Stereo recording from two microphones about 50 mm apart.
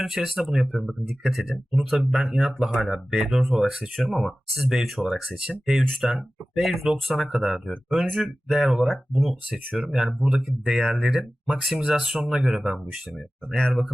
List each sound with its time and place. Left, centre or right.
0.0 s speech: centre
9.8 s speech: right
10.1 s speech: centre
11.4 s speech: centre
13.6 s speech: centre